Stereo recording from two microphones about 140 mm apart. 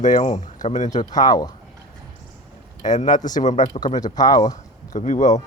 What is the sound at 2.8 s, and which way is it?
Speech, 65° left (ahead or behind).